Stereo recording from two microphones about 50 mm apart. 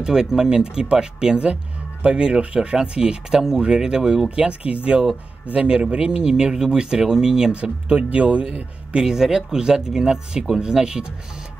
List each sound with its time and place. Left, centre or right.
0.0 s speech: centre
7.5 s speech: right